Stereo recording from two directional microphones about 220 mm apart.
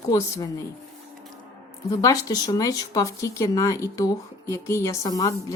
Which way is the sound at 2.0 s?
15° left (ahead or behind).